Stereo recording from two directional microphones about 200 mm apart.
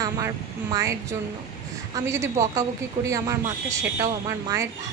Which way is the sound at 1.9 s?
15° right (ahead or behind).